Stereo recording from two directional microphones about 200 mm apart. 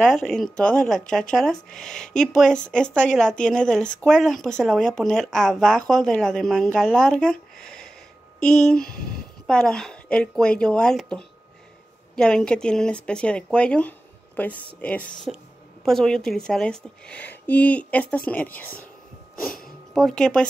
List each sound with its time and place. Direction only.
0.0 s a woman's voice: centre (ahead or behind)